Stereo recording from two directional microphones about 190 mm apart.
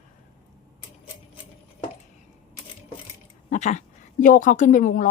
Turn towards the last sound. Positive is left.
turn(degrees=45)  # may be behind; listen again after turning